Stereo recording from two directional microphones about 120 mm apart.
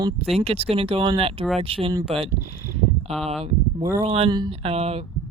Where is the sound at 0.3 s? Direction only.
55° right (ahead or behind).